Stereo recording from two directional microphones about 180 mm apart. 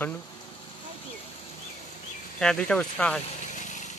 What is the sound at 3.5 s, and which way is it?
Lawn mower, 45° left (ahead or behind).